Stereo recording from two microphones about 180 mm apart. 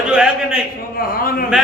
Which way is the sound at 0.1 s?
5° right (ahead or behind).